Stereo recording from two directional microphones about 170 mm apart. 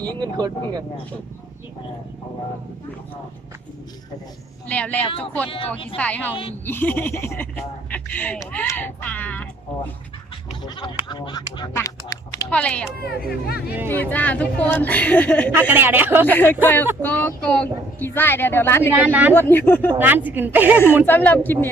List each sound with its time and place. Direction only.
0.2 s speech: 25° right (ahead or behind)
4.7 s a woman's voice: 10° left (ahead or behind)
5.5 s speech: 30° left (ahead or behind)
6.0 s a woman's voice: 10° left (ahead or behind)
10.6 s speech: 25° left (ahead or behind)
12.5 s a woman's voice: 5° left (ahead or behind)
13.0 s speech: 65° left (ahead or behind)
13.8 s a woman's voice: 10° left (ahead or behind)
15.5 s a woman's voice: 10° right (ahead or behind)
16.2 s a woman's voice: 10° left (ahead or behind)
18.9 s a woman's voice: 10° right (ahead or behind)
19.3 s a woman's voice: 10° left (ahead or behind)
20.0 s a woman's voice: 10° right (ahead or behind)
21.1 s a woman's voice: 10° left (ahead or behind)